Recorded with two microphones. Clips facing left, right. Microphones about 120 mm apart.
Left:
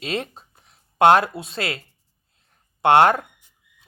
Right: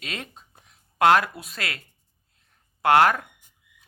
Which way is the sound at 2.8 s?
25° left (ahead or behind).